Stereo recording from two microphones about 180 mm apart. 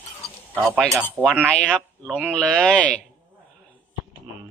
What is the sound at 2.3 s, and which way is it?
Speech, 5° left (ahead or behind).